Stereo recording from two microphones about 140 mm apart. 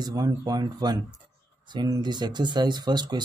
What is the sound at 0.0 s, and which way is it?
Speech, 25° right (ahead or behind).